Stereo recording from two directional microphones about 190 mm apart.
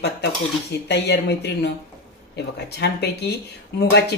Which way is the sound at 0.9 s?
60° left (ahead or behind).